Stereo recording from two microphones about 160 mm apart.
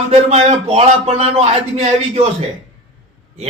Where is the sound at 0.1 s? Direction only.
45° right (ahead or behind).